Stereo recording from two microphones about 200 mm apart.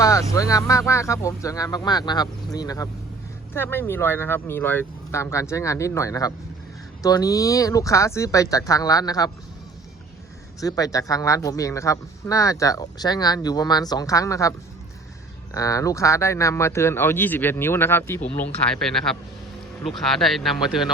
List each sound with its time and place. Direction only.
0.0 s speech: 15° left (ahead or behind)
10.6 s speech: 15° left (ahead or behind)
15.5 s speech: 15° left (ahead or behind); by 20.8 s centre (ahead or behind)